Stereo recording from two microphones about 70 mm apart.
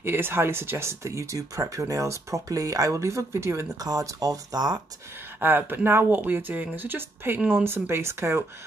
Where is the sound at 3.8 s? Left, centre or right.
Right.